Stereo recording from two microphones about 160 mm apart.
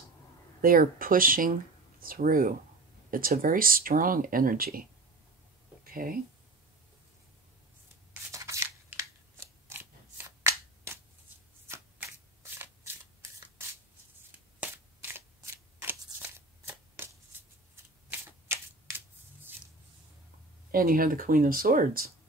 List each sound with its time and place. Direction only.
0.6 s speech: 65° right (ahead or behind)
5.9 s a sound: 60° right (ahead or behind)
8.1 s scissors: 20° right (ahead or behind)
11.6 s shuffling cards: 15° right (ahead or behind)
14.6 s a sound: 15° right (ahead or behind)
15.8 s shuffling cards: 15° right (ahead or behind)
18.5 s shuffling cards: 15° right (ahead or behind)
20.7 s speech: 60° right (ahead or behind)